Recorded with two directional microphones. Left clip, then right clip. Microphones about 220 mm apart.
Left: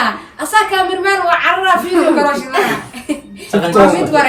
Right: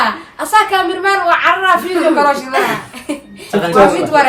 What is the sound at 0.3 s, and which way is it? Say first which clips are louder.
A woman's voice: right 1 dB; 15° right (ahead or behind).